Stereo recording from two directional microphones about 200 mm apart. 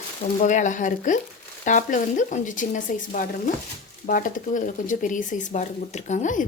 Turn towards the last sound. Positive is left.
turn(degrees=40)  # may be behind; listen again after turning